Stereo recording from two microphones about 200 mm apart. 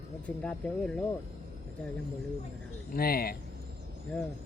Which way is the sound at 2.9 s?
50° left (ahead or behind).